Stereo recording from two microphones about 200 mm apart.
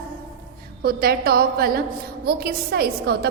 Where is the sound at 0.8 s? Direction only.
50° right (ahead or behind).